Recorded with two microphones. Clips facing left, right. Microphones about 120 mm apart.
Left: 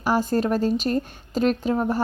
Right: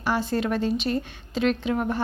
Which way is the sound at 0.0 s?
45° left (ahead or behind).